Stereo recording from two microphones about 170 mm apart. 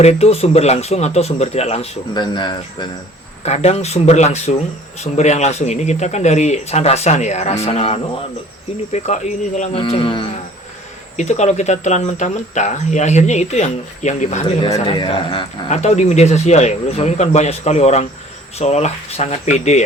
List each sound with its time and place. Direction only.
0.0 s speech: 35° left (ahead or behind)
2.1 s cricket: 25° left (ahead or behind)
3.4 s speech: 40° left (ahead or behind)
11.2 s speech: 40° left (ahead or behind)
14.4 s speech: 30° left (ahead or behind)